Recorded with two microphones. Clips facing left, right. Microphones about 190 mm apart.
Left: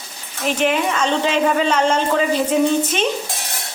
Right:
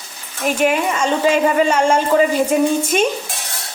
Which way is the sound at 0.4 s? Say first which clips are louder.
Right 2 dB; 10° right (ahead or behind).